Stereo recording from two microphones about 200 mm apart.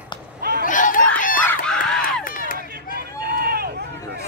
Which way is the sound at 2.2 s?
45° left (ahead or behind).